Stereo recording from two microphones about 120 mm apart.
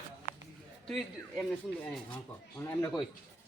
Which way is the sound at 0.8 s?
5° left (ahead or behind).